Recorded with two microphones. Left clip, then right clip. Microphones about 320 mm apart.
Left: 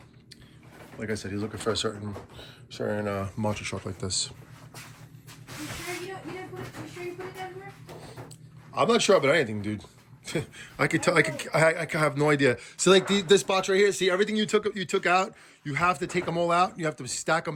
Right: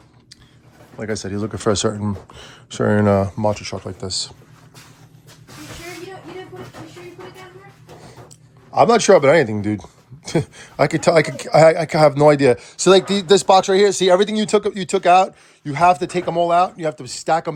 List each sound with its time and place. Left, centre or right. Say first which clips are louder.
0.9 s a man's voice: right 8 dB; centre
2.8 s speech: right 12 dB; right
3.2 s a man's voice: right 10 dB; centre
8.7 s speech: right 10 dB; right
10.2 s a man's voice: right 10 dB; centre